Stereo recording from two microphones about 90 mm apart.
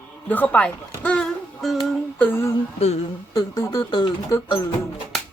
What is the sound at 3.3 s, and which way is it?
Speech, 45° left (ahead or behind).